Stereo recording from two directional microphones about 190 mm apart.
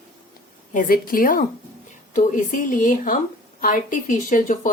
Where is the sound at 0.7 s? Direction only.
45° left (ahead or behind).